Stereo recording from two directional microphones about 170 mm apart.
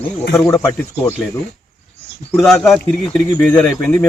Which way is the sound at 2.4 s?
Centre (ahead or behind).